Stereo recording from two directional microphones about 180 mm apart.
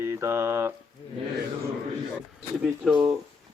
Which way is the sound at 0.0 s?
15° right (ahead or behind).